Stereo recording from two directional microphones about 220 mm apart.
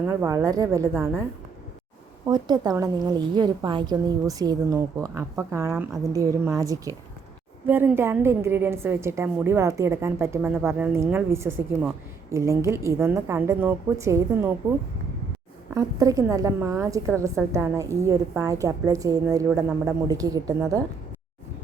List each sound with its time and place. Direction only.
0.0 s a woman's voice: 10° right (ahead or behind)
2.2 s a woman's voice: 15° right (ahead or behind)
15.7 s a woman's voice: 15° right (ahead or behind)